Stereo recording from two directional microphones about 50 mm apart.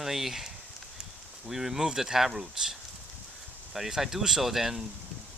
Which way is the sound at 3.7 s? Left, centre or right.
Centre.